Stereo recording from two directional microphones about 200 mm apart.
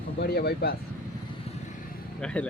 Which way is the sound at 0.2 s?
50° left (ahead or behind).